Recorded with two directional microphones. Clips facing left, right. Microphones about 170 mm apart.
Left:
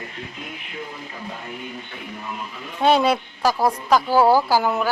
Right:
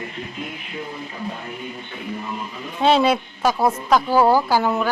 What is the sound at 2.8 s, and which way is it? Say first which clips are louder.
A woman's voice: right 1 dB; centre (ahead or behind).